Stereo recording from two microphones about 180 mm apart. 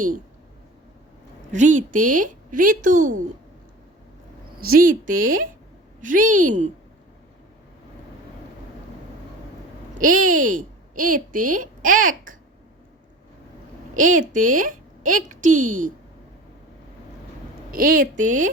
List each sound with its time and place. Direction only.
1.5 s a woman's voice: 45° right (ahead or behind)
4.7 s a woman's voice: 50° right (ahead or behind)
10.0 s a woman's voice: 50° right (ahead or behind)
13.9 s a woman's voice: 45° right (ahead or behind)
17.7 s a woman's voice: 50° right (ahead or behind)